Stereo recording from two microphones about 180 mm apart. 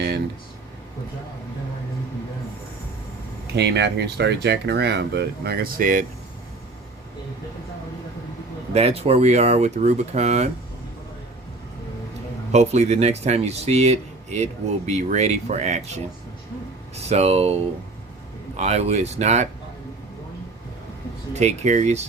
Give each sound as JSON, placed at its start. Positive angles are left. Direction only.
{"t": 3.4, "sound": "speech", "side_deg": -70}
{"t": 8.7, "sound": "speech", "side_deg": -35}
{"t": 12.5, "sound": "speech", "side_deg": -40}
{"t": 16.9, "sound": "speech", "side_deg": -35}
{"t": 21.3, "sound": "speech", "side_deg": -40}